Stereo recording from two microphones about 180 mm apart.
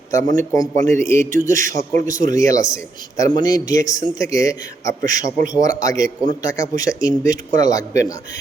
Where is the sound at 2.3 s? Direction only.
20° left (ahead or behind).